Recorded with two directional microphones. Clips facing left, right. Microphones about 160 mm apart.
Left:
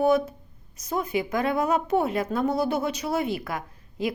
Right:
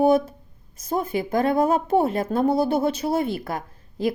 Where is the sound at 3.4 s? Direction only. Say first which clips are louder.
Right 3 dB; 30° right (ahead or behind).